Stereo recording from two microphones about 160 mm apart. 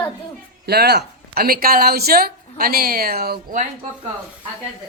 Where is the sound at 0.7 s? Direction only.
80° right.